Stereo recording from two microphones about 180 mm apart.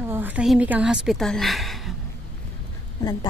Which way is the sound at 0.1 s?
10° right (ahead or behind).